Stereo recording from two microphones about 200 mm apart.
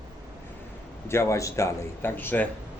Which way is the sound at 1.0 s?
15° left (ahead or behind).